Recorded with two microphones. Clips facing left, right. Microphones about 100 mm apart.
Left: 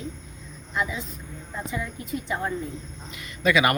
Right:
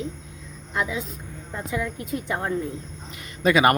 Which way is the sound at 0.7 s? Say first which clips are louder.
Right 2 dB; 90° right.